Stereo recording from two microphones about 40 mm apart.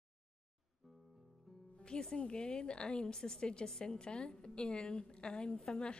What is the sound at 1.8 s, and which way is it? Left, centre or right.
Music, left.